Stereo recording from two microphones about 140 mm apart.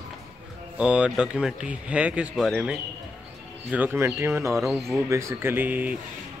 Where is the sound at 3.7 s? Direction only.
15° right (ahead or behind).